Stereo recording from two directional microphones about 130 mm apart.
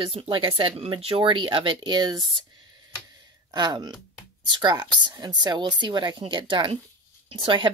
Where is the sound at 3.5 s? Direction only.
35° right (ahead or behind).